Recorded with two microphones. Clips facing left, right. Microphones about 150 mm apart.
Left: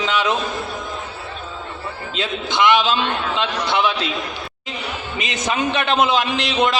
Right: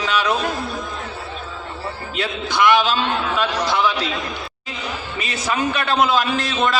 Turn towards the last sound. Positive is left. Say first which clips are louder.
# even
turn(degrees=20)  # may be behind; listen again after turning